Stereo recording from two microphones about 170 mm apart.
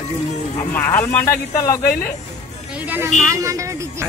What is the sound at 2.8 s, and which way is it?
Speech, 10° right (ahead or behind).